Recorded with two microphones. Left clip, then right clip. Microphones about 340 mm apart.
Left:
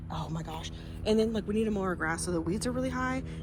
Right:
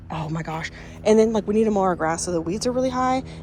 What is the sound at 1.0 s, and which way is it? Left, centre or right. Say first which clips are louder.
Speech: right 11 dB; centre.